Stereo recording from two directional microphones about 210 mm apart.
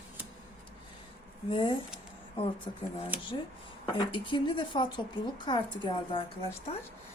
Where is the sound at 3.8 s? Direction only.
20° left (ahead or behind).